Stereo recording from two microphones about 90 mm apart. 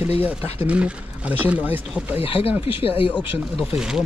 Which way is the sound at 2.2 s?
90° left.